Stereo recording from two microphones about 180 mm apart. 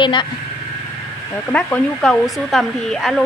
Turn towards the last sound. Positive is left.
turn(degrees=0)  # may be behind; listen again after turning